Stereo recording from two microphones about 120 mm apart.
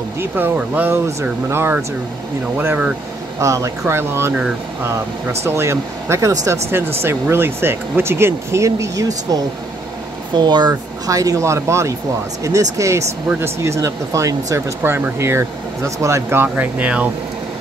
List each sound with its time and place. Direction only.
0.2 s speech: 15° right (ahead or behind)
3.3 s speech: 25° right (ahead or behind)
5.4 s speech: 20° right (ahead or behind)